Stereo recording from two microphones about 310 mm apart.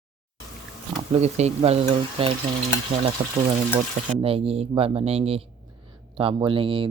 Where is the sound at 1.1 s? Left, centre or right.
Right.